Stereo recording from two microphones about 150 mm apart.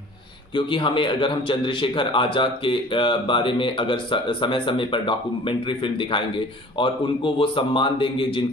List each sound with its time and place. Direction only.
0.6 s a man's voice: 35° left (ahead or behind)